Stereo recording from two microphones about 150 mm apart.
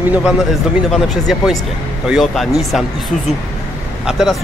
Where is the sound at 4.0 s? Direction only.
Centre (ahead or behind).